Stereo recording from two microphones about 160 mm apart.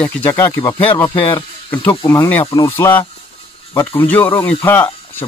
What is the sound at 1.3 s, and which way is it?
Speech, 30° left (ahead or behind).